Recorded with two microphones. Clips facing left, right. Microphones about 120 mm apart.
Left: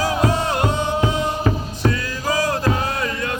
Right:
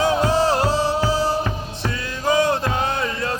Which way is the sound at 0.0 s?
30° right (ahead or behind).